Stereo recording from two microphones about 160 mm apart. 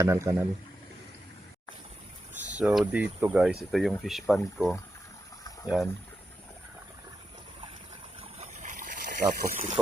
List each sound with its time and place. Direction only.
0.0 s speech: 20° right (ahead or behind)
2.3 s speech: 10° right (ahead or behind)
8.2 s trickle: 45° right (ahead or behind)